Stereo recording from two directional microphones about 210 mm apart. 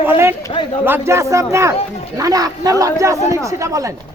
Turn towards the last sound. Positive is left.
turn(degrees=-15)  # may be behind; listen again after turning